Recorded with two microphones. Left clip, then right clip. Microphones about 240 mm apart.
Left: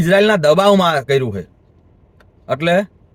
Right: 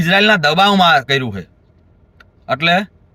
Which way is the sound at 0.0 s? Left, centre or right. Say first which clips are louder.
Even; centre.